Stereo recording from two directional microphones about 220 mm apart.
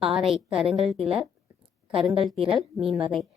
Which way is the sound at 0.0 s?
Centre (ahead or behind).